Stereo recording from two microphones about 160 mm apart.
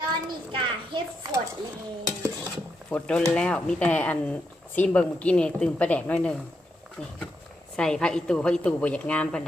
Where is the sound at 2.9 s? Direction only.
5° left (ahead or behind).